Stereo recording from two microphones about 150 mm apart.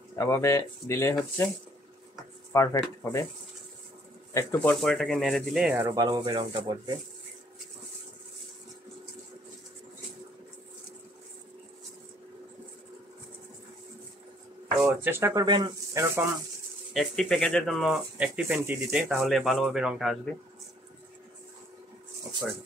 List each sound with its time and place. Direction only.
0.1 s speech: 20° left (ahead or behind)
2.5 s speech: 20° left (ahead or behind)
4.3 s speech: 20° left (ahead or behind)
4.6 s speech: 5° left (ahead or behind)
5.9 s speech: 30° right (ahead or behind)
14.8 s speech: 15° right (ahead or behind)
15.4 s speech: 30° right (ahead or behind)
16.9 s speech: centre (ahead or behind)